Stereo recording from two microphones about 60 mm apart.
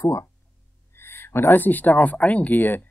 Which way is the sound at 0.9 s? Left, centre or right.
Left.